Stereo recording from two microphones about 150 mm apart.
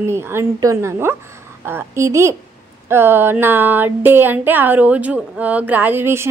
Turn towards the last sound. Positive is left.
turn(degrees=-15)  # may be behind; listen again after turning